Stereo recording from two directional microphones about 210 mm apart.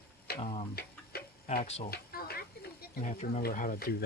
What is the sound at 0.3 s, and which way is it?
Tick-tock, 25° left (ahead or behind).